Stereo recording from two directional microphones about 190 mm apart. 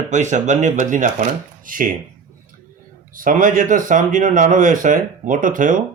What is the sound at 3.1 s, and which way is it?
Speech, 45° right (ahead or behind).